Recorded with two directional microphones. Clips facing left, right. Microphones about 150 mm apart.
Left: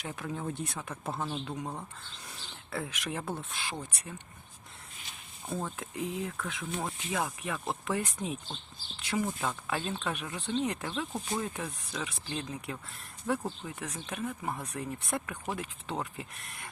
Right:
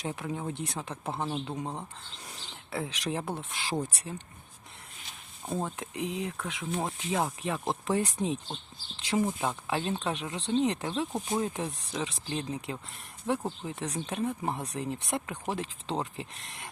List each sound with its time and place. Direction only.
0.1 s speech: 15° right (ahead or behind)
0.7 s speech: 25° right (ahead or behind)
2.3 s a sound: 20° right (ahead or behind)
3.0 s speech: 30° right (ahead or behind)
5.5 s speech: 20° right (ahead or behind)
11.1 s speech: 20° right (ahead or behind)